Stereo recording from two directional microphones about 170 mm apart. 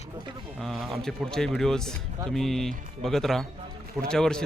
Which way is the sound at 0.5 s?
Centre (ahead or behind).